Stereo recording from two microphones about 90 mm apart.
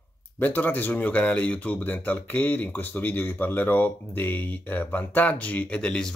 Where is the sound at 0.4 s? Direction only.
20° left (ahead or behind).